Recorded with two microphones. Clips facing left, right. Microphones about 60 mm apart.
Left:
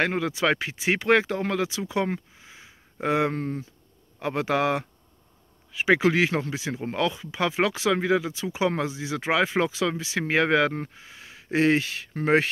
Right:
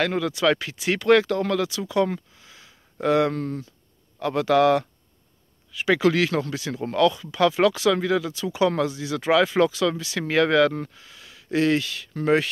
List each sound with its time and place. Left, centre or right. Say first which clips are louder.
0.0 s speech: right 2 dB; left